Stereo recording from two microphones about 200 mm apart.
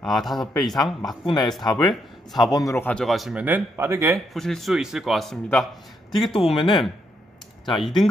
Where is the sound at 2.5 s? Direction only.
15° left (ahead or behind); by 4.2 s 15° right (ahead or behind).